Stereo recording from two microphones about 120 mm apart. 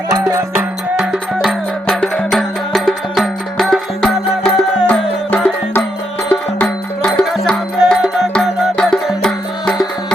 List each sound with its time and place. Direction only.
0.1 s music: 25° right (ahead or behind)
0.9 s music: 5° right (ahead or behind)
1.9 s music: 5° left (ahead or behind)